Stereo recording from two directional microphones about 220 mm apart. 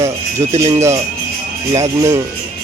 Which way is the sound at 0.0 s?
15° right (ahead or behind).